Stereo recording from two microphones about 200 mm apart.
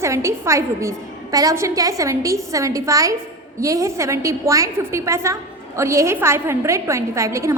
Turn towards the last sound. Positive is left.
turn(degrees=-15)  # may be behind; listen again after turning